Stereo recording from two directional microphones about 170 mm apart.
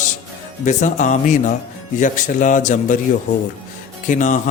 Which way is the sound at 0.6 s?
45° left (ahead or behind).